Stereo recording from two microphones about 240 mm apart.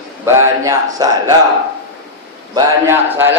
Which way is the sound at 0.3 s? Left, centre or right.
Centre.